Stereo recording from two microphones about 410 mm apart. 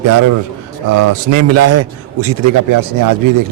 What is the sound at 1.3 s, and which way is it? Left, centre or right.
A man's voice, right.